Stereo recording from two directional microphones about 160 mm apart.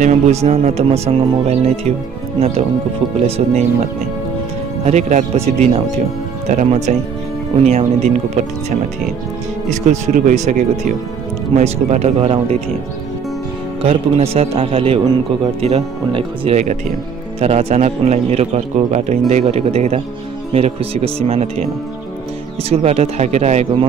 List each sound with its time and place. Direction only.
0.0 s speech: 45° right (ahead or behind)
3.3 s speech: 40° right (ahead or behind)
4.8 s speech: 45° right (ahead or behind)
9.8 s speech: 50° right (ahead or behind)
13.8 s speech: 40° right (ahead or behind)